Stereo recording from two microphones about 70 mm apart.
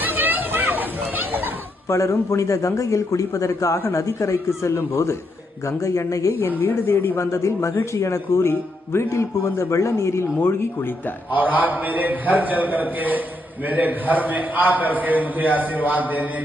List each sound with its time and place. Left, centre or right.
0.0 s chatter: right
1.9 s a man's voice: left
6.6 s a man's voice: left
11.3 s a man's voice: right